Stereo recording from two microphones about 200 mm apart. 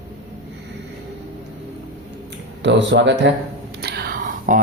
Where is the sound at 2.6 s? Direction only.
60° right (ahead or behind).